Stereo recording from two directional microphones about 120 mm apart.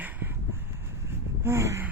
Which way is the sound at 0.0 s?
15° right (ahead or behind).